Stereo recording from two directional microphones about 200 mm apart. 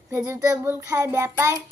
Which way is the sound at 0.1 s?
10° right (ahead or behind).